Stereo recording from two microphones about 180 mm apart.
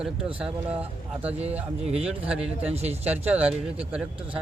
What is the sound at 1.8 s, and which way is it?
Speech, 35° right (ahead or behind).